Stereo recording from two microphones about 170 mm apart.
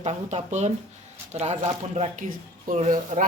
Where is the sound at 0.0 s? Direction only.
40° right (ahead or behind).